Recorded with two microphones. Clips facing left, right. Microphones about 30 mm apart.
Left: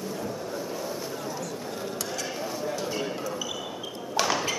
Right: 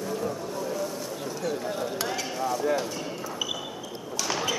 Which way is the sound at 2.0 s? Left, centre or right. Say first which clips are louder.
Right 3 dB; centre.